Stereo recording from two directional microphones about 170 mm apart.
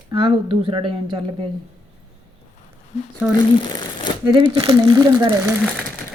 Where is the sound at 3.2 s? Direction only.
5° right (ahead or behind).